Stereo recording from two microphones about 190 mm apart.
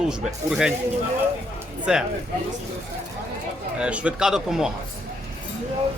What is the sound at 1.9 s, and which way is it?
Speech, 5° right (ahead or behind).